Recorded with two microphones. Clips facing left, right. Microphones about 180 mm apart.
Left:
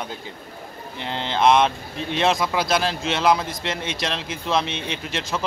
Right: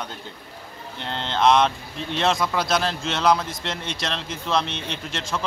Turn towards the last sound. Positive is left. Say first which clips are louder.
# left 2 dB
turn(degrees=5)  # may be behind; listen again after turning